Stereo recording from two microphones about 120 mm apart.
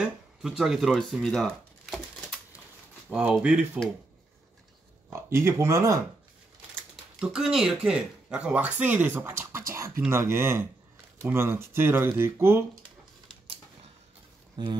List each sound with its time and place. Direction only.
0.4 s crumpling: 5° right (ahead or behind)
3.1 s speech: 10° right (ahead or behind)
5.1 s speech: 20° right (ahead or behind)
7.2 s speech: 5° right (ahead or behind); by 12.6 s 20° right (ahead or behind)